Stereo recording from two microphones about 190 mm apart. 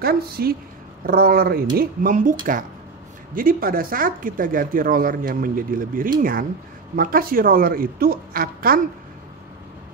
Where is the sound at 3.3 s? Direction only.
50° right (ahead or behind).